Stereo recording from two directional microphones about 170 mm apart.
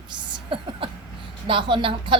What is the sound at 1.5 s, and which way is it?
Speech, 30° right (ahead or behind).